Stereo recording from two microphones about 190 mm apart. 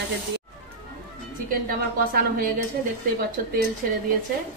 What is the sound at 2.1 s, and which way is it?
Speech, 50° right (ahead or behind).